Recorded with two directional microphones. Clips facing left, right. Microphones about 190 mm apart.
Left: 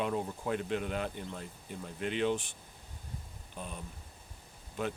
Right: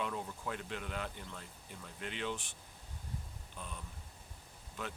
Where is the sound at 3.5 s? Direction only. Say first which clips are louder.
Left 5 dB; 20° left (ahead or behind).